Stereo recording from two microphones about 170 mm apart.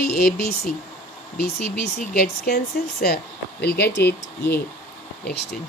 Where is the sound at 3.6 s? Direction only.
80° left.